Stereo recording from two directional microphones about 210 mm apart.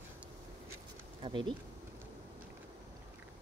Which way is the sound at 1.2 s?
25° right (ahead or behind).